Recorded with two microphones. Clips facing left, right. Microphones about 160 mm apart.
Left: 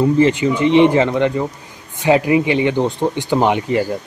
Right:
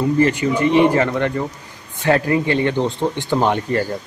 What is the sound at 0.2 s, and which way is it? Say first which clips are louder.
Speech: left 2 dB; 25° left (ahead or behind).